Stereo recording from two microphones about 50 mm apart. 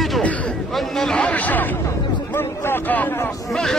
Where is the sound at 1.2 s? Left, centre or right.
Left.